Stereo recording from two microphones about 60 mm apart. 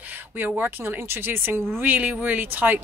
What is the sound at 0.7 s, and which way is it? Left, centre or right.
A woman's voice, right.